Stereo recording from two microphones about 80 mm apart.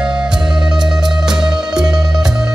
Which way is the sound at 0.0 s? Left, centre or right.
Centre.